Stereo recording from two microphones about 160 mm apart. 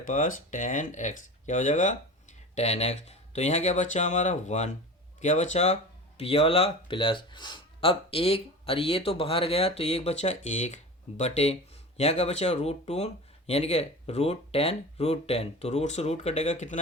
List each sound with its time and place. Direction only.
0.1 s speech: 55° left (ahead or behind)